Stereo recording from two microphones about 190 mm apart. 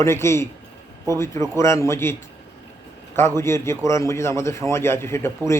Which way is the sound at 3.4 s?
15° left (ahead or behind).